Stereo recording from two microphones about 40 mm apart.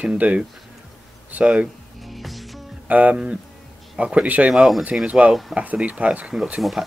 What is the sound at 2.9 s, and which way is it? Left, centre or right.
Speech, right.